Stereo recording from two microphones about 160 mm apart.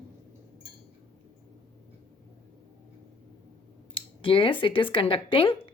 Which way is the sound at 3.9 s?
30° left (ahead or behind).